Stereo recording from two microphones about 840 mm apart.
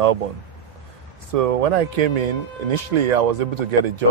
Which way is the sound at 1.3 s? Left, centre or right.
Right.